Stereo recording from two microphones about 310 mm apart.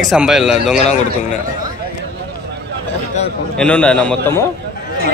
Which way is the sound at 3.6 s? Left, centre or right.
Centre.